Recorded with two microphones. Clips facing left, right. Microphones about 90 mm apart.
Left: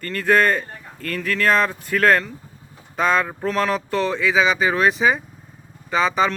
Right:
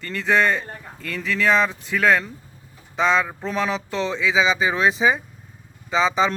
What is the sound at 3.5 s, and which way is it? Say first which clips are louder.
Speech: left 4 dB; 10° right (ahead or behind).